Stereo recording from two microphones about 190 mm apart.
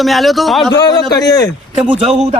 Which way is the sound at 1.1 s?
20° left (ahead or behind).